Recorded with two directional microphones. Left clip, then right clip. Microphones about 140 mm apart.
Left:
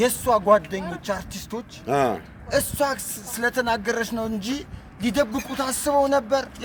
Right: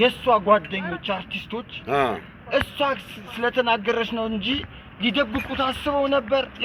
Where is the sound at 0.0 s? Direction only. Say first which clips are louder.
Right 1 dB; 35° left (ahead or behind).